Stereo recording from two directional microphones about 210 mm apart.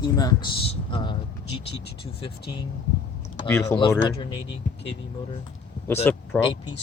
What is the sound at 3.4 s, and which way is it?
Speech, 10° left (ahead or behind).